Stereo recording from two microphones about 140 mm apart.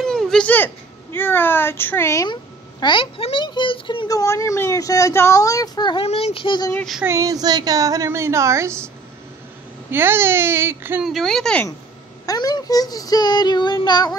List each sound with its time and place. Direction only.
0.0 s a sound: 5° left (ahead or behind)
1.1 s speech: 15° left (ahead or behind)
2.8 s a child's voice: 35° left (ahead or behind)
4.1 s speech: 25° left (ahead or behind)
6.0 s a child's voice: 45° left (ahead or behind)
6.7 s speech: 5° left (ahead or behind)
7.1 s a woman's voice: 25° right (ahead or behind)
11.1 s speech: centre (ahead or behind)
12.3 s speech: 30° left (ahead or behind)